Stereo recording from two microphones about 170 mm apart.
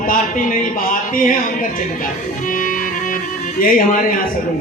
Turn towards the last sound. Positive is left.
turn(degrees=55)  # may be behind; listen again after turning